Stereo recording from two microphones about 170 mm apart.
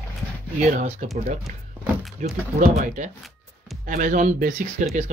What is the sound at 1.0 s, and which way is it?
Speech, 45° right (ahead or behind).